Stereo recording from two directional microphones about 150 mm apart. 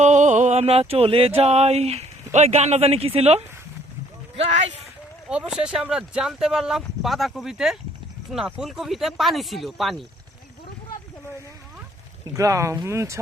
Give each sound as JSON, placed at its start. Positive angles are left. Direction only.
{"t": 0.0, "sound": "music", "side_deg": -55}
{"t": 1.4, "sound": "speech", "side_deg": -45}
{"t": 5.3, "sound": "speech", "side_deg": -5}
{"t": 12.3, "sound": "speech", "side_deg": -20}